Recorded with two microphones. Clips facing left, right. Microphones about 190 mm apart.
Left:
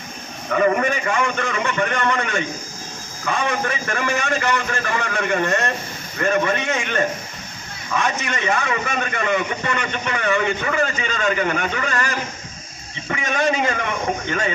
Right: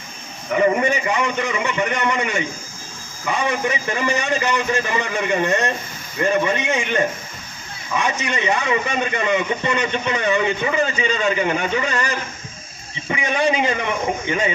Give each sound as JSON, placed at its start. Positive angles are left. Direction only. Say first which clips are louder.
{"t": 0.5, "sound": "a man's voice", "louder": "right 1 dB", "side_deg": -20}